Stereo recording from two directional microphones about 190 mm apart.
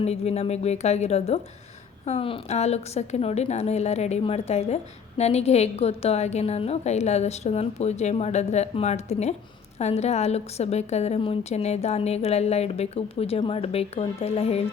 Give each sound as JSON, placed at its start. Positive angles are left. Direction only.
{"t": 0.0, "sound": "a woman's voice", "side_deg": 35}